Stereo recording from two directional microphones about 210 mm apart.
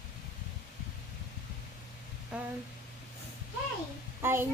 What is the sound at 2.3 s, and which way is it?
Speech, 5° right (ahead or behind).